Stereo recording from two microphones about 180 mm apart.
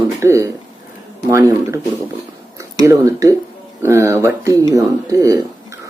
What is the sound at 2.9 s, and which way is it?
Speech, 15° right (ahead or behind).